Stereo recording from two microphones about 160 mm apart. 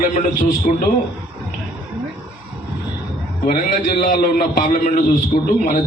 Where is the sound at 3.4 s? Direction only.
55° left (ahead or behind).